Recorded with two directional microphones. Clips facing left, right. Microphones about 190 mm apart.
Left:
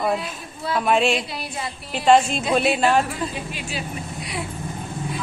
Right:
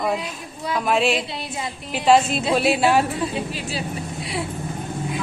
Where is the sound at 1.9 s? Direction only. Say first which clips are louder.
Even; centre (ahead or behind).